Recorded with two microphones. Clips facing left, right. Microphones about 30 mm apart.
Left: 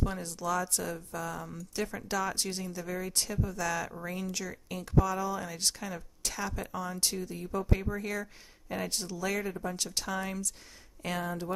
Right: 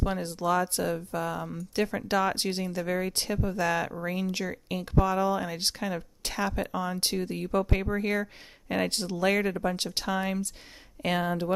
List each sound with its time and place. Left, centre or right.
0.0 s speech: right
11.0 s speech: right